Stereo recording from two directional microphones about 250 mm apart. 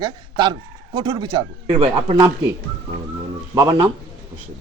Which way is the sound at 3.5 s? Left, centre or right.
Centre.